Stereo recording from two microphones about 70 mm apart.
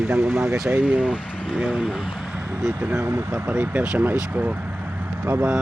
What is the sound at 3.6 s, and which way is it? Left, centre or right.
Speech, right.